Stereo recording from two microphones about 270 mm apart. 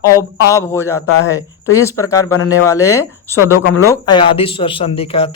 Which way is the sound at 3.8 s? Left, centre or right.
Centre.